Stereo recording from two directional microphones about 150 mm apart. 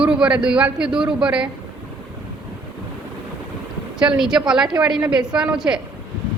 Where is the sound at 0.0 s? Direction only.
5° right (ahead or behind).